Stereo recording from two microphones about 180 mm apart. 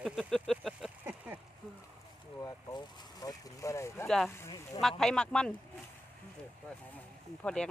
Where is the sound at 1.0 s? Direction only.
10° right (ahead or behind).